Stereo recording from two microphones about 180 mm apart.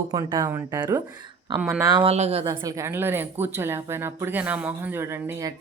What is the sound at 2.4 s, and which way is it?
Speech, 20° right (ahead or behind).